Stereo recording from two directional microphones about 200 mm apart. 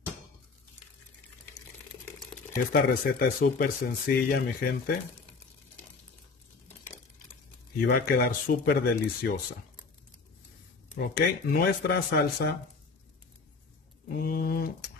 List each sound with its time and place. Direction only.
2.5 s speech: 50° left (ahead or behind)
7.8 s speech: 50° left (ahead or behind)
11.0 s speech: 55° left (ahead or behind)
14.1 s a sound: 50° left (ahead or behind)